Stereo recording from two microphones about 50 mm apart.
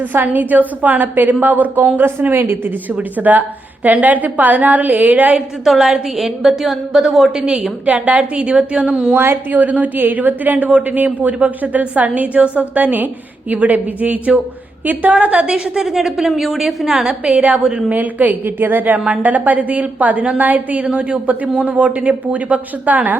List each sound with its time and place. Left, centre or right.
0.0 s a woman's voice: right
2.0 s a woman's voice: right
3.0 s a woman's voice: right
5.6 s a woman's voice: centre
7.3 s a woman's voice: centre
7.9 s a woman's voice: right
9.1 s a woman's voice: right
15.5 s a woman's voice: centre
17.2 s a woman's voice: right
17.9 s a woman's voice: right
18.4 s a woman's voice: right